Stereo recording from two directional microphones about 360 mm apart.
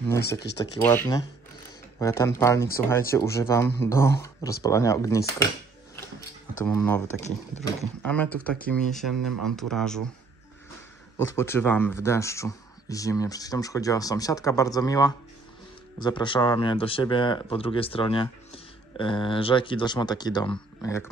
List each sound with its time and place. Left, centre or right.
0.6 s speech: centre
6.6 s speech: centre
7.2 s speech: centre
7.8 s speech: centre
11.1 s speech: centre